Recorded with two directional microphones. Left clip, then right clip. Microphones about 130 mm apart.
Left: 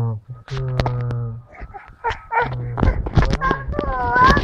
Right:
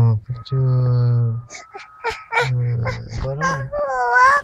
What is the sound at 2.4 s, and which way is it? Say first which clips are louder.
Speech: left 2 dB; 50° right (ahead or behind).